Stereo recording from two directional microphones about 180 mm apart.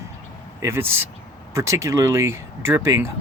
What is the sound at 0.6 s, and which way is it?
Speech, 15° right (ahead or behind).